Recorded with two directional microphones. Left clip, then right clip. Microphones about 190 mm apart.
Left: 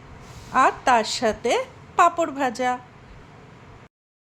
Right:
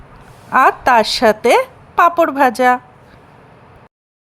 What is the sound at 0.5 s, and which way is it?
A woman's voice, 35° right (ahead or behind).